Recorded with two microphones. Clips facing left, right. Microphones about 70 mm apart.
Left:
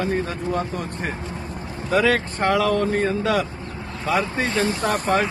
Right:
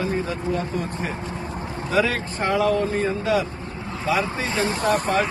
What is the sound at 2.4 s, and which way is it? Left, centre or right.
Speech, left.